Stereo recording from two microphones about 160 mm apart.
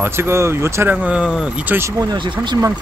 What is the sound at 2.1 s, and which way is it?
Speech, 25° right (ahead or behind).